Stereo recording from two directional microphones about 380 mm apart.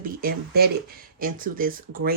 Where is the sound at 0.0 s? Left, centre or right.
Right.